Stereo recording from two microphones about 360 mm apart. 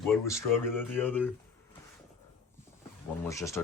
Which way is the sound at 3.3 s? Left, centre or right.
Centre.